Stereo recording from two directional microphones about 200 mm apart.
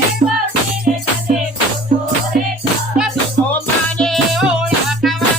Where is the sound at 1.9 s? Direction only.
40° right (ahead or behind).